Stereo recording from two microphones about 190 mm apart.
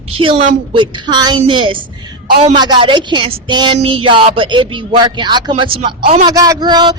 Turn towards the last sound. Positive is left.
turn(degrees=-25)  # may be behind; listen again after turning